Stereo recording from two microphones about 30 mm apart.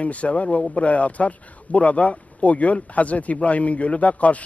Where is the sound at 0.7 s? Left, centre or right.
Left.